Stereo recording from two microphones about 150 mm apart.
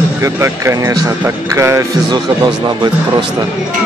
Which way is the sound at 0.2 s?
20° right (ahead or behind).